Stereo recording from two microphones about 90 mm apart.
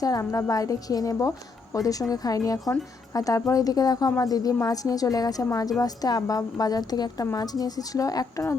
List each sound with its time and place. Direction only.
0.0 s a woman's voice: 40° left (ahead or behind)